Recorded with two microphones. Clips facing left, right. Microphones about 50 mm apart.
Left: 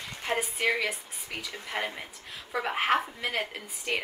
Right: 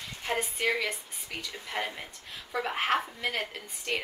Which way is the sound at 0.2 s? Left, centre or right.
Centre.